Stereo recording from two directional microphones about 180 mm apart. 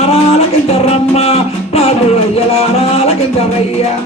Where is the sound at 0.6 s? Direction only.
35° left (ahead or behind).